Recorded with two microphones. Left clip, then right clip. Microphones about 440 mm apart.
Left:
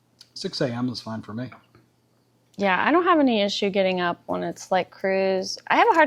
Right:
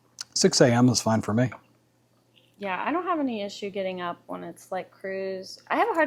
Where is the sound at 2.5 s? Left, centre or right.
Left.